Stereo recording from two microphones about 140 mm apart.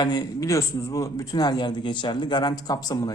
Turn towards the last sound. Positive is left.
turn(degrees=30)  # may be behind; listen again after turning